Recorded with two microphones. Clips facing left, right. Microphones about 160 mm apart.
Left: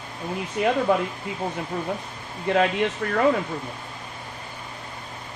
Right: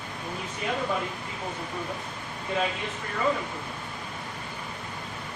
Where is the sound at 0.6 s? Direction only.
70° left (ahead or behind).